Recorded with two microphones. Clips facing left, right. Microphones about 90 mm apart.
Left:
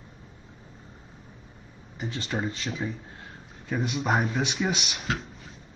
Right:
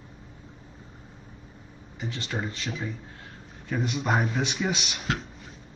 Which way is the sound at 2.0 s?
20° left (ahead or behind).